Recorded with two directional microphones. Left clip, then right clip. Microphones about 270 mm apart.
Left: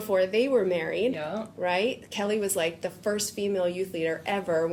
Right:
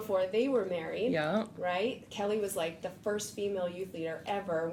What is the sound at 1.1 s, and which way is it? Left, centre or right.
Speech, right.